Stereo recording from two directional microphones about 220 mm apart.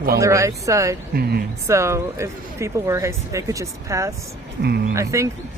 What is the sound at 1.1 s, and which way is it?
Speech, 45° right (ahead or behind).